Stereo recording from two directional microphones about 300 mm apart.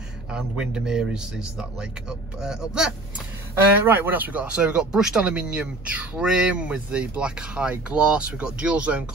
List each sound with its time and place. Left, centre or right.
0.3 s speech: centre